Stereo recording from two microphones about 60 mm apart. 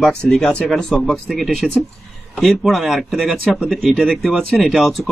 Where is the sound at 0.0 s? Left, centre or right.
Centre.